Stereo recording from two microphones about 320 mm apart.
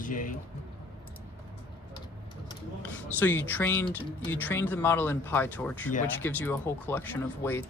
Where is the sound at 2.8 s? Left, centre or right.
Centre.